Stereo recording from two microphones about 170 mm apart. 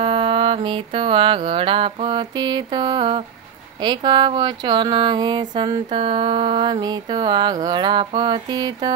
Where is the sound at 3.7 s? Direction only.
25° right (ahead or behind).